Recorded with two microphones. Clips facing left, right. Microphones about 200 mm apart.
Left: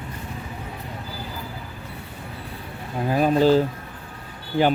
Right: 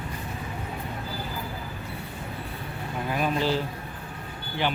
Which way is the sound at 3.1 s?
40° left (ahead or behind).